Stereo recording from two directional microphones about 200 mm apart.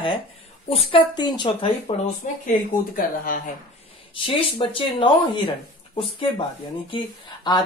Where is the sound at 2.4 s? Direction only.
45° left (ahead or behind).